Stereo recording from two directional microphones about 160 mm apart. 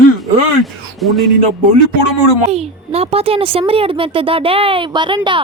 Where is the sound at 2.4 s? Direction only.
40° right (ahead or behind).